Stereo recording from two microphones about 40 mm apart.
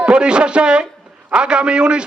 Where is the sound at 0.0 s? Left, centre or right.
Right.